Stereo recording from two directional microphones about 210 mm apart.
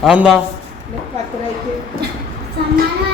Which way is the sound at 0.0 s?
5° right (ahead or behind).